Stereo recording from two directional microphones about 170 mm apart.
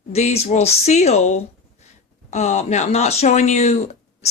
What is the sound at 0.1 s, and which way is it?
Speech, 40° left (ahead or behind).